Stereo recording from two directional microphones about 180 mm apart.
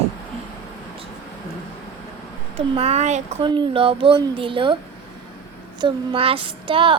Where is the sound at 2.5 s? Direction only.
35° right (ahead or behind).